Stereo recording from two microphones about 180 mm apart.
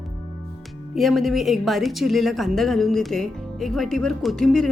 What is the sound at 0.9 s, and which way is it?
A woman's voice, centre (ahead or behind).